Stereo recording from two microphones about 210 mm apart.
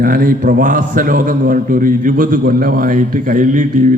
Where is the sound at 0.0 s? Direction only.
40° right (ahead or behind).